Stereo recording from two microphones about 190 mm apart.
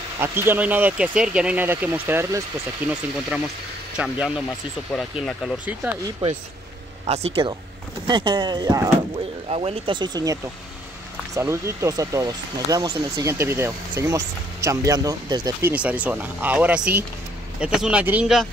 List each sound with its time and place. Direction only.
0.2 s speech: 10° right (ahead or behind)
7.1 s speech: 30° right (ahead or behind)
9.5 s speech: 30° right (ahead or behind)
15.7 s speech: 5° right (ahead or behind)